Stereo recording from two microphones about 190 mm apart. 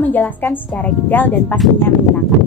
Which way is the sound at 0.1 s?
10° left (ahead or behind).